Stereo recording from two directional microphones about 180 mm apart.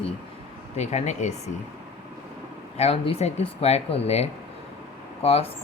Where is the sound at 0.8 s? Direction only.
40° left (ahead or behind).